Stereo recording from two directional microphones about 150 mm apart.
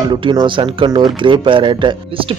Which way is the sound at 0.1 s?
30° right (ahead or behind).